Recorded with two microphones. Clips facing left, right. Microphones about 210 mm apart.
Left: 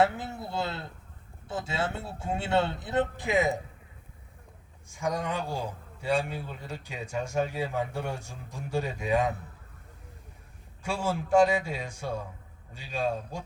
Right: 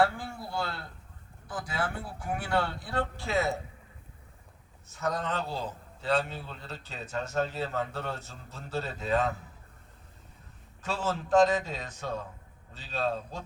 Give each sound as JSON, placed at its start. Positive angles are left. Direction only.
{"t": 0.0, "sound": "a man's voice", "side_deg": 20}
{"t": 4.9, "sound": "a man's voice", "side_deg": 10}
{"t": 10.8, "sound": "a man's voice", "side_deg": 10}